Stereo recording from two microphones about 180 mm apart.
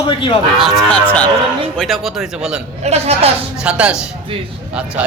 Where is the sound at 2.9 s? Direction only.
35° right (ahead or behind).